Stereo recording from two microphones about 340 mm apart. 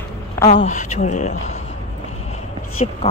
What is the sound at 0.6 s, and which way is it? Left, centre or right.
Speech, left.